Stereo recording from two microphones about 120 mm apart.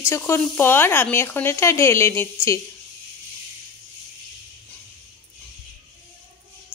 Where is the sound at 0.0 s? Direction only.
25° left (ahead or behind).